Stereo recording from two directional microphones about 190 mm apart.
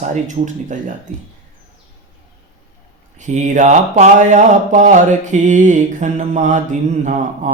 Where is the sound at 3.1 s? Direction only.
40° right (ahead or behind).